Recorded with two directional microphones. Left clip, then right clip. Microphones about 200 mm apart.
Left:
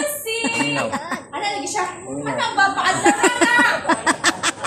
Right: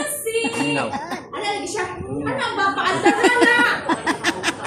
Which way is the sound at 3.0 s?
20° left (ahead or behind).